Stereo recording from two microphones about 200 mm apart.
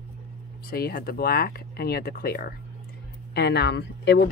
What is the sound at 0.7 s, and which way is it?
Speech, 50° left (ahead or behind).